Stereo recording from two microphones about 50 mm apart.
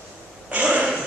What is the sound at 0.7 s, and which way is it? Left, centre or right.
Dog, centre.